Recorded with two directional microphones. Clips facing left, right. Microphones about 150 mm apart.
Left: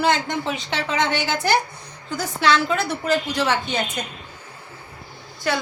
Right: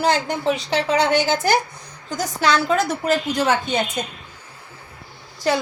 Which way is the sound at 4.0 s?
20° right (ahead or behind).